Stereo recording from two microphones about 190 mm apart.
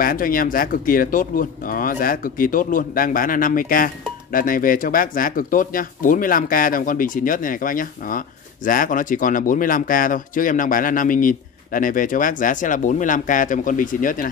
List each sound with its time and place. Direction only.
0.0 s speech: 50° left (ahead or behind)